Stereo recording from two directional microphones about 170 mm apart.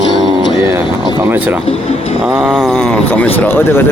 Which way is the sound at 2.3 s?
5° right (ahead or behind).